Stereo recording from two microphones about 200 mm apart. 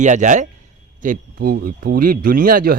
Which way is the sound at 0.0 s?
35° right (ahead or behind).